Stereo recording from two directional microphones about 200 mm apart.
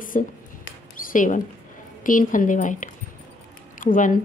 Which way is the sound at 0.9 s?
40° left (ahead or behind).